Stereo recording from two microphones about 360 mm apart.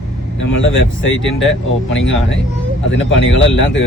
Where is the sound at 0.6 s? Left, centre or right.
Left.